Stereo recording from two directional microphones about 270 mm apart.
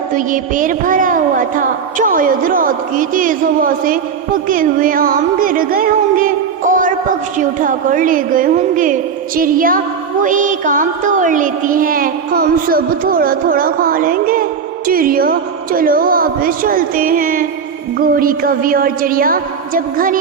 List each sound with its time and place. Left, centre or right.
0.1 s speech: right
4.4 s music: right
7.3 s a woman's voice: right